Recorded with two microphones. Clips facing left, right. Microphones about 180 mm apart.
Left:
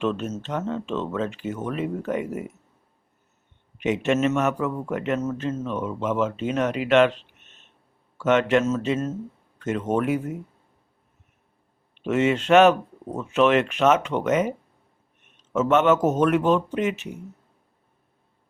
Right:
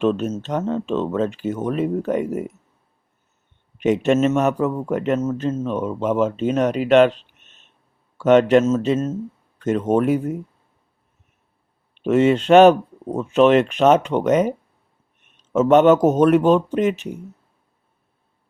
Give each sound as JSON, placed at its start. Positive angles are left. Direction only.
{"t": 0.0, "sound": "speech", "side_deg": -40}
{"t": 3.8, "sound": "speech", "side_deg": -35}
{"t": 8.2, "sound": "speech", "side_deg": -35}
{"t": 12.0, "sound": "speech", "side_deg": -35}
{"t": 15.5, "sound": "speech", "side_deg": -35}